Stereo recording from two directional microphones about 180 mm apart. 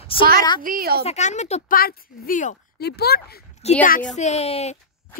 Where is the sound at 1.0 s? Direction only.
40° left (ahead or behind).